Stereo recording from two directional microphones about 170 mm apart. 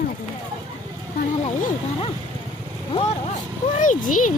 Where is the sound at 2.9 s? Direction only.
40° left (ahead or behind).